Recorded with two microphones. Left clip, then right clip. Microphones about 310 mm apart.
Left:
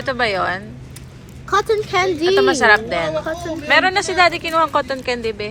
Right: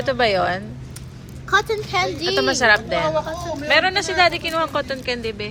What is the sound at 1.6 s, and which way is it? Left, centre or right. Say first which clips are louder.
Speech: left 4 dB; left.